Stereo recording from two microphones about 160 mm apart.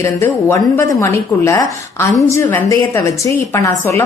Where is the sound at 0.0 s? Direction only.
15° left (ahead or behind).